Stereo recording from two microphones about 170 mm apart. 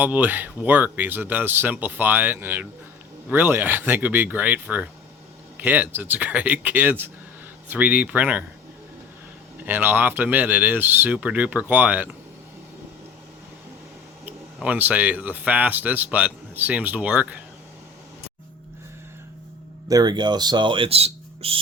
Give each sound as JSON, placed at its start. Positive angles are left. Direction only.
{"t": 0.0, "sound": "speech", "side_deg": -10}
{"t": 9.6, "sound": "speech", "side_deg": -10}
{"t": 14.3, "sound": "speech", "side_deg": -10}
{"t": 19.9, "sound": "speech", "side_deg": -25}